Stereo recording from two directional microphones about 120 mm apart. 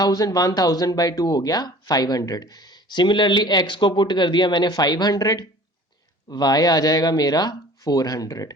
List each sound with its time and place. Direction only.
0.0 s speech: 30° left (ahead or behind)